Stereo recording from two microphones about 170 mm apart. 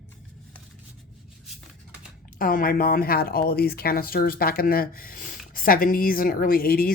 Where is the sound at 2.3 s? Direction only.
55° left (ahead or behind).